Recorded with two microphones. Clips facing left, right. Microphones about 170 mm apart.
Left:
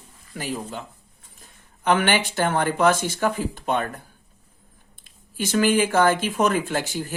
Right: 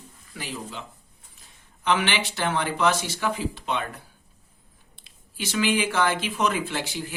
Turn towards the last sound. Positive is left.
turn(degrees=45)  # may be behind; listen again after turning